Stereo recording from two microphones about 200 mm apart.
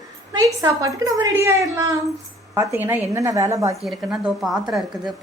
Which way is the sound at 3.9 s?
5° right (ahead or behind).